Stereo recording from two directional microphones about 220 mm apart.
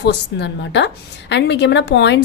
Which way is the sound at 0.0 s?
50° left (ahead or behind).